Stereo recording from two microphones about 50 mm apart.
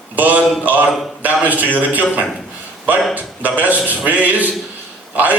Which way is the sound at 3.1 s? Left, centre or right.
Right.